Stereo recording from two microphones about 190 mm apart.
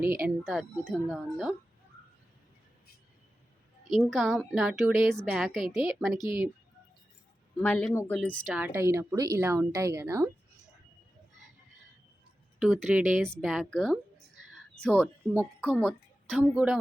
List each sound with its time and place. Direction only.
0.0 s speech: 50° right (ahead or behind)
0.3 s a woman's voice: centre (ahead or behind)
3.9 s a woman's voice: centre (ahead or behind)
7.6 s a woman's voice: 5° left (ahead or behind)
8.5 s a woman's voice: 10° right (ahead or behind)
12.5 s a woman's voice: centre (ahead or behind)